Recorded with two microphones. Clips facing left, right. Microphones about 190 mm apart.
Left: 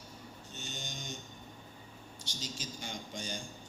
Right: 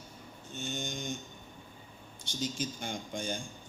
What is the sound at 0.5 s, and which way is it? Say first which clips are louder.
Mantra: right 8 dB; 55° right (ahead or behind).